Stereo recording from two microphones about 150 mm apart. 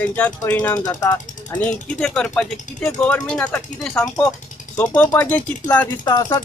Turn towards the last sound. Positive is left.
turn(degrees=25)  # may be behind; listen again after turning